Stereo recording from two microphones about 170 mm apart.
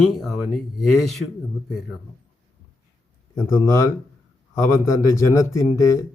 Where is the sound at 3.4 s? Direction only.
15° left (ahead or behind).